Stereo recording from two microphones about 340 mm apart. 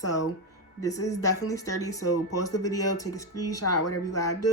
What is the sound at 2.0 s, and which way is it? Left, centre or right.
Speech, left.